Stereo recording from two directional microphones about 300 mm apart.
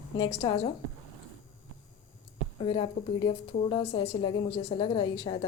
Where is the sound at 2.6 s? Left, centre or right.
Centre.